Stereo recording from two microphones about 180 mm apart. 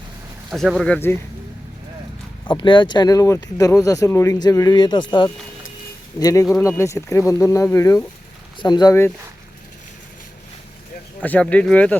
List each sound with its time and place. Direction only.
0.5 s speech: centre (ahead or behind)
0.9 s speech: 10° left (ahead or behind)
2.5 s speech: 25° left (ahead or behind)
11.2 s speech: 10° left (ahead or behind)